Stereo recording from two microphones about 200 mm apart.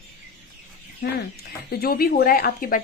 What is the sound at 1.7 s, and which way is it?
Speech, 50° left (ahead or behind).